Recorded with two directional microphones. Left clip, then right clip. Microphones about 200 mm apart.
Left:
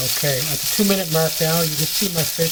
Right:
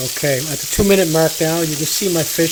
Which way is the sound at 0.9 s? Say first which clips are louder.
Right 9 dB; 50° right (ahead or behind).